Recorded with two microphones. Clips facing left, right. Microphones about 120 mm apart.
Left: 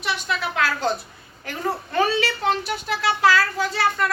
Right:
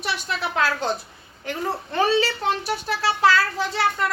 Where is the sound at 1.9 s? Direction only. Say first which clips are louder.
Right 2 dB; 25° right (ahead or behind).